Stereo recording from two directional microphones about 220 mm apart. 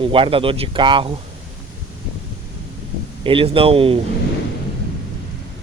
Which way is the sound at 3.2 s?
25° right (ahead or behind).